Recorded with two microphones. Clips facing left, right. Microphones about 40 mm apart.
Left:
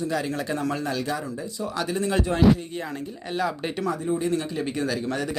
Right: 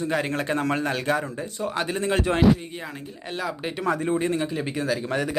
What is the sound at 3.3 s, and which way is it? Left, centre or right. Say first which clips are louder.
Speech: left 2 dB; centre.